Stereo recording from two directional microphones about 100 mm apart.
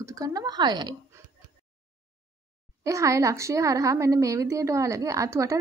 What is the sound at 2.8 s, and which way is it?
A woman's voice, 30° right (ahead or behind).